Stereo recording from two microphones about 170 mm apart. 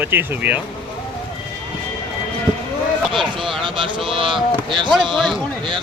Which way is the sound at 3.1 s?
30° right (ahead or behind).